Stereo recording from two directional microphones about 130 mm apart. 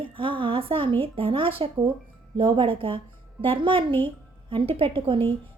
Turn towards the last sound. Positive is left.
turn(degrees=-40)  # may be behind; listen again after turning